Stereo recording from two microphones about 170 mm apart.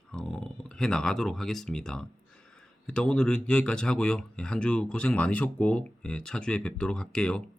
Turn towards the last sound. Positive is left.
turn(degrees=5)  # may be behind; listen again after turning